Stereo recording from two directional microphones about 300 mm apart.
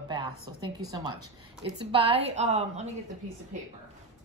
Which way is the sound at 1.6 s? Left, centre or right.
Centre.